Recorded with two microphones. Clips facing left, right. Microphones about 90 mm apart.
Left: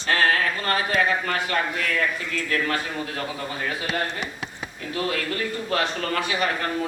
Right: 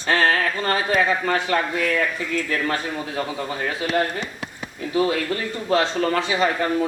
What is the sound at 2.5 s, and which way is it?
Speech, 20° right (ahead or behind).